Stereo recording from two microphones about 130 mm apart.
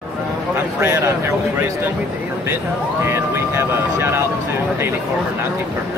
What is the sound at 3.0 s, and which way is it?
Speech, 20° right (ahead or behind).